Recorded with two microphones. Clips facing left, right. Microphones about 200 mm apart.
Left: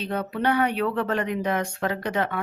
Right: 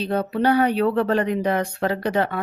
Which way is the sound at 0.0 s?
35° right (ahead or behind).